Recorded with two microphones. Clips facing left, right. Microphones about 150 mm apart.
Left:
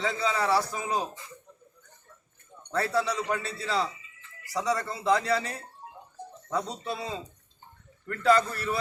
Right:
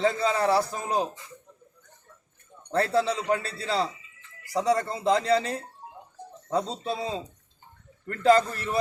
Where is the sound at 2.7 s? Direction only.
30° right (ahead or behind).